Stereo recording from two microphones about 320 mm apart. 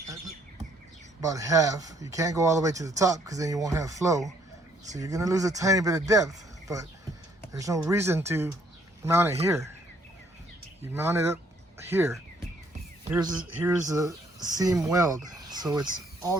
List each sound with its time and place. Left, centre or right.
1.2 s speech: centre
10.9 s speech: centre